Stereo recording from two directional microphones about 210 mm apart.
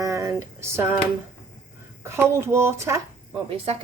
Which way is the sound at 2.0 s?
10° right (ahead or behind).